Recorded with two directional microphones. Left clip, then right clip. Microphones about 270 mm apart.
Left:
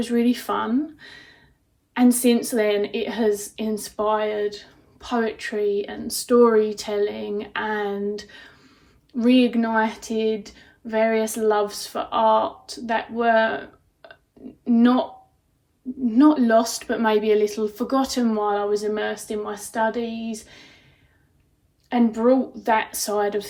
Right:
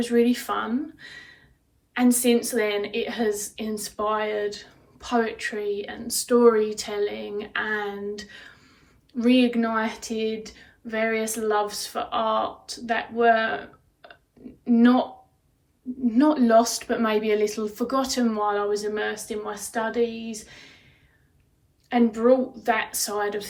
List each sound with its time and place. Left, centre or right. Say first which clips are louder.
0.0 s a woman's voice: right 1 dB; centre
16.0 s a woman's voice: left 3 dB; centre
21.8 s a woman's voice: even; centre